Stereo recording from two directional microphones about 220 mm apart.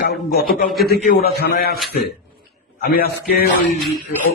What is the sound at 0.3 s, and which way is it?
A man's voice, 40° left (ahead or behind).